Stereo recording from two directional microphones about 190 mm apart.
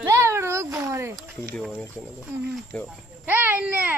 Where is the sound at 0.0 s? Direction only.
15° right (ahead or behind).